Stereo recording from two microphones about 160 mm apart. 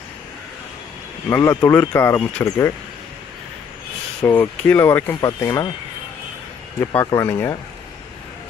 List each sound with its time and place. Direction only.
1.3 s speech: 20° left (ahead or behind)
4.2 s speech: 10° left (ahead or behind)
6.8 s speech: 15° left (ahead or behind)